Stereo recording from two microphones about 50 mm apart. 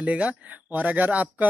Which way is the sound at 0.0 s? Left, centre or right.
Right.